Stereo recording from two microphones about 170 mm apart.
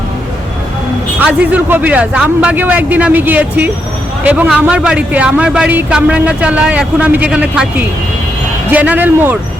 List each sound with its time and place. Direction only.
1.2 s a man's voice: 10° right (ahead or behind)